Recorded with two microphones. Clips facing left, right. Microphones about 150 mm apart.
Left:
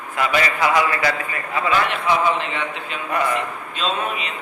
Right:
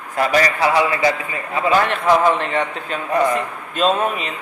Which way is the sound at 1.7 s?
40° right (ahead or behind).